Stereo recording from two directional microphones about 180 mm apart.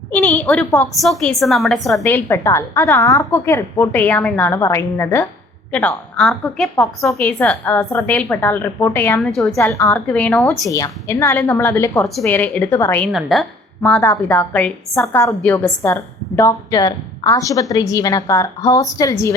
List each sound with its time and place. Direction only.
0.1 s a woman's voice: 5° left (ahead or behind)
2.0 s a woman's voice: 10° left (ahead or behind)
10.7 s a woman's voice: 20° left (ahead or behind)
13.1 s a woman's voice: centre (ahead or behind)
14.0 s a woman's voice: 15° left (ahead or behind)